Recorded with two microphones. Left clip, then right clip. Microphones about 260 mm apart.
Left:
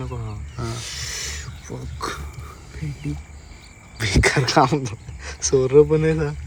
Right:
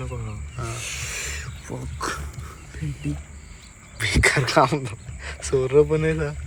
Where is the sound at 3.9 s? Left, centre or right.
Centre.